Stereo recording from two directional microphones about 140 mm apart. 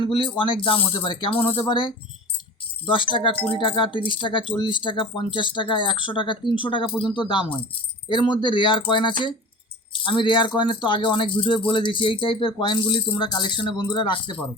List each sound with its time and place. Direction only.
0.0 s speech: 40° left (ahead or behind)